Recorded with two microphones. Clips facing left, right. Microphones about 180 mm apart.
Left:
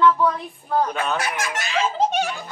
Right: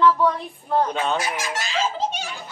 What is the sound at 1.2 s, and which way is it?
Speech, 60° left (ahead or behind).